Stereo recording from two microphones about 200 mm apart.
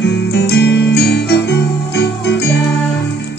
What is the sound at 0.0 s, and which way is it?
Music, 60° left (ahead or behind).